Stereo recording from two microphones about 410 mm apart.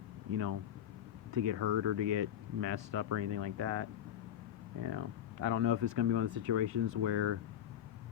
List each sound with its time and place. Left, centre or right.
1.3 s speech: right
4.9 s speech: right